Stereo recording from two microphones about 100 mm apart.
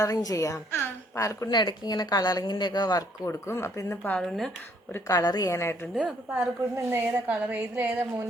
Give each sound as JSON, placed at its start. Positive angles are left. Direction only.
{"t": 0.0, "sound": "a woman's voice", "side_deg": 35}
{"t": 1.5, "sound": "a woman's voice", "side_deg": 45}
{"t": 3.2, "sound": "speech", "side_deg": 25}
{"t": 4.2, "sound": "speech", "side_deg": 5}
{"t": 5.0, "sound": "a woman's voice", "side_deg": 40}
{"t": 5.5, "sound": "speech", "side_deg": 25}
{"t": 6.0, "sound": "a woman's voice", "side_deg": -15}